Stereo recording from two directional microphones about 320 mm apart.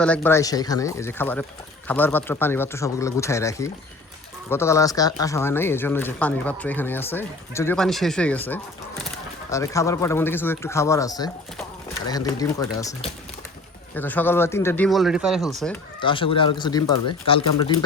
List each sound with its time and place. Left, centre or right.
0.0 s speech: centre
16.0 s speech: centre